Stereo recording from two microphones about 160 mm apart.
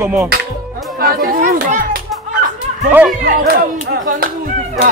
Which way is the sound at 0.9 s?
65° right (ahead or behind).